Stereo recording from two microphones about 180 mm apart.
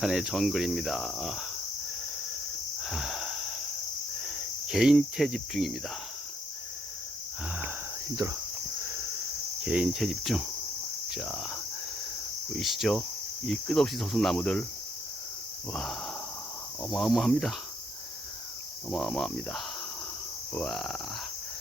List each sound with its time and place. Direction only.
0.0 s cricket: centre (ahead or behind)
2.8 s wheeze: centre (ahead or behind)
4.7 s cricket: 5° right (ahead or behind)
8.1 s speech: 20° right (ahead or behind)
9.6 s cricket: 5° right (ahead or behind)
11.1 s speech: 5° right (ahead or behind)
12.5 s cricket: centre (ahead or behind)
15.7 s cricket: centre (ahead or behind)
18.9 s cricket: centre (ahead or behind)